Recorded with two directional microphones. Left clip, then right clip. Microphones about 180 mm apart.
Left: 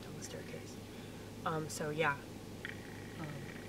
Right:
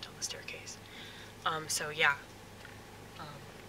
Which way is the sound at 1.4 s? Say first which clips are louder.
Right 4 dB; 30° right (ahead or behind).